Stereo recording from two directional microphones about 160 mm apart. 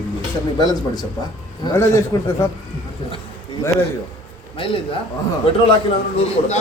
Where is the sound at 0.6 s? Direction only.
25° left (ahead or behind).